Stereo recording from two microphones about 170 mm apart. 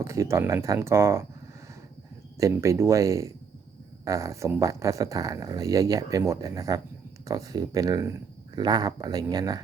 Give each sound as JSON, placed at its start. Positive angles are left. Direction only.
{"t": 0.0, "sound": "speech", "side_deg": -15}
{"t": 2.4, "sound": "speech", "side_deg": -15}